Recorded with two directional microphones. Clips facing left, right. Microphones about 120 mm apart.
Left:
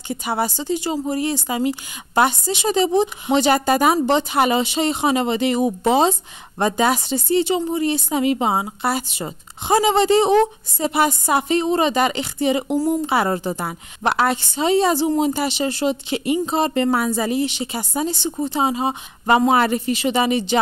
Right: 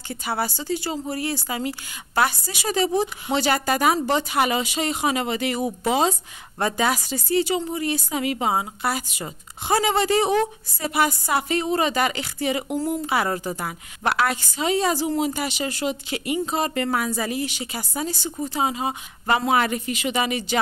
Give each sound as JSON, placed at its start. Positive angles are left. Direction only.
{"t": 0.1, "sound": "a woman's voice", "side_deg": 20}